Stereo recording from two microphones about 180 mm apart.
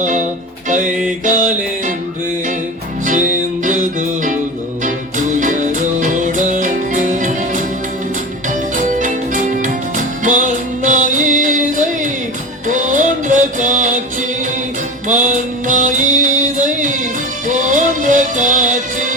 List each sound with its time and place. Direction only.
1.2 s music: 45° right (ahead or behind)
3.1 s music: 45° right (ahead or behind)
15.6 s music: 45° right (ahead or behind)